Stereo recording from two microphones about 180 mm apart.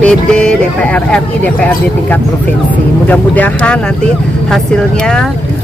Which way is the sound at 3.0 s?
10° left (ahead or behind).